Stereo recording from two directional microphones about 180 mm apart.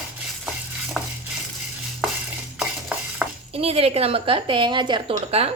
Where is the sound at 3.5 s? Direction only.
35° right (ahead or behind).